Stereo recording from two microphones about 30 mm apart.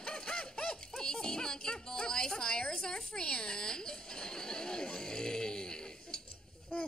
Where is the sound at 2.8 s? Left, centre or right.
Left.